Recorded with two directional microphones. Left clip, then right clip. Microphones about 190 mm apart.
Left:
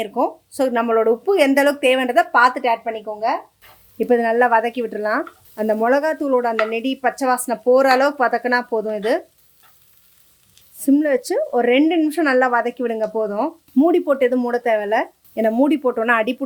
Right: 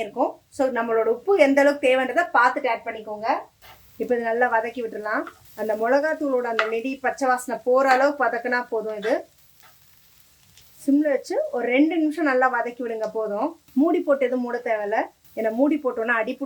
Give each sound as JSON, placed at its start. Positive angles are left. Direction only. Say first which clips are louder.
{"t": 0.0, "sound": "speech", "louder": "left 4 dB", "side_deg": 50}
{"t": 10.8, "sound": "speech", "louder": "left 4 dB", "side_deg": 55}